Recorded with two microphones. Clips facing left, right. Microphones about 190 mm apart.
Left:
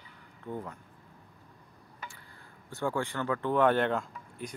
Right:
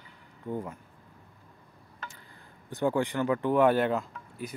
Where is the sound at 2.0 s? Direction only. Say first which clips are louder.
Right 1 dB; 10° left (ahead or behind).